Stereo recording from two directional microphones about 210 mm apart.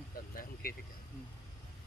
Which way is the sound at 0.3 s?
45° left (ahead or behind).